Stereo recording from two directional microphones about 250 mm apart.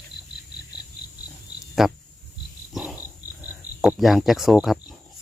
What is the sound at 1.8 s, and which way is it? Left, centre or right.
Speech, centre.